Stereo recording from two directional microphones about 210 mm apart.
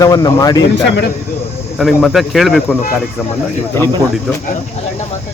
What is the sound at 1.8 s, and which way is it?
A man's voice, centre (ahead or behind).